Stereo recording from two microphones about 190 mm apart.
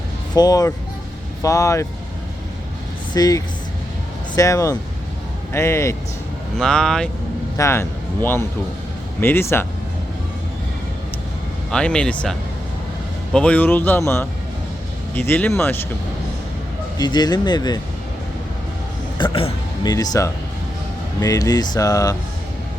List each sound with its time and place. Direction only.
0.3 s speech: 20° left (ahead or behind)
3.2 s speech: 20° left (ahead or behind)
6.6 s speech: 5° left (ahead or behind)
7.5 s a man's voice: 15° left (ahead or behind)
11.7 s speech: 5° left (ahead or behind)
15.1 s speech: 10° left (ahead or behind)
17.0 s speech: 20° left (ahead or behind)
19.2 s speech: 25° left (ahead or behind)